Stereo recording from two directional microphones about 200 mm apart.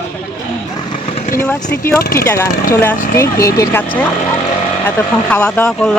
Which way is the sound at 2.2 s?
15° left (ahead or behind).